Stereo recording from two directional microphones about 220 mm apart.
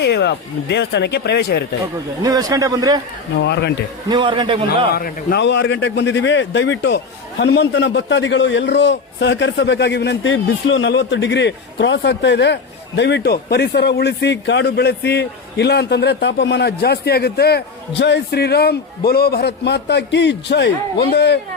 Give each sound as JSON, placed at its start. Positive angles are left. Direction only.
{"t": 0.0, "sound": "a man's voice", "side_deg": 50}
{"t": 2.2, "sound": "a man's voice", "side_deg": -15}
{"t": 3.3, "sound": "a man's voice", "side_deg": 50}
{"t": 4.1, "sound": "a man's voice", "side_deg": -20}
{"t": 4.9, "sound": "a man's voice", "side_deg": 45}